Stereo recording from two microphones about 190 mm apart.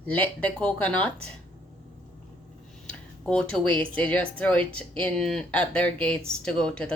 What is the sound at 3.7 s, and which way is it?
Speech, 25° right (ahead or behind).